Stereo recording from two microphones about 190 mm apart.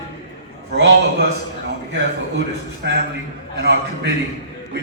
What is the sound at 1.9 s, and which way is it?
A man's voice, 65° right (ahead or behind).